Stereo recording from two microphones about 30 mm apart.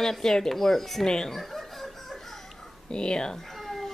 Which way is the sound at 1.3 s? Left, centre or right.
Centre.